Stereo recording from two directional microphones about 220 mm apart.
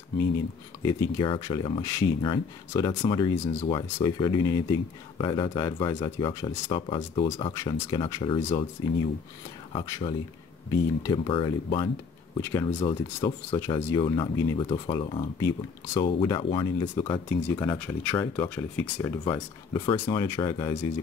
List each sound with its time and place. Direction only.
0.8 s speech: 15° left (ahead or behind)
9.7 s speech: 20° left (ahead or behind)
12.4 s speech: 10° left (ahead or behind)
12.8 s speech: 25° left (ahead or behind)
13.6 s speech: 10° left (ahead or behind)
19.7 s speech: 20° left (ahead or behind)